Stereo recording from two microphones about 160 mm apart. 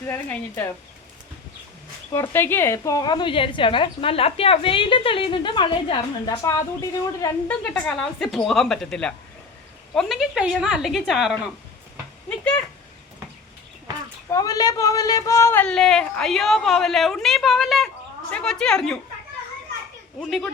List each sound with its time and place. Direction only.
0.1 s speech: 10° left (ahead or behind)
2.1 s a woman's voice: 15° left (ahead or behind)
7.4 s speech: 10° left (ahead or behind)
14.3 s speech: 20° left (ahead or behind); by 18.9 s 5° left (ahead or behind)
20.2 s speech: centre (ahead or behind)